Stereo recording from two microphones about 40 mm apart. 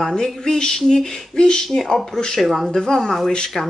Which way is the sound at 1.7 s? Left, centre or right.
Centre.